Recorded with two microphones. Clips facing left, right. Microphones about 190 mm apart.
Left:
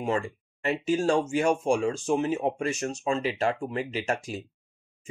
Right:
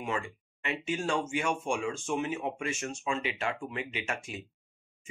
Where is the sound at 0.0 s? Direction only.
40° left (ahead or behind).